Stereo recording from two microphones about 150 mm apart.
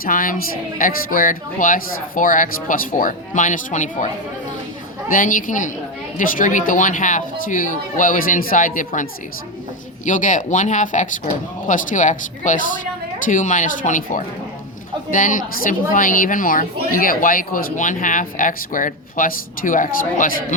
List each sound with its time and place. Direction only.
0.0 s speech: 65° left (ahead or behind)
10.1 s speech: 60° left (ahead or behind)